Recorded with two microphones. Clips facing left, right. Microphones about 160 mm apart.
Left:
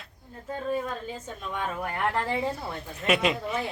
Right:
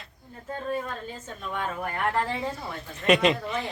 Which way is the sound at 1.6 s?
10° left (ahead or behind).